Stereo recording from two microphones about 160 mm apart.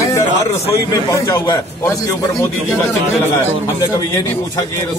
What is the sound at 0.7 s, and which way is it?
Speech, 20° left (ahead or behind).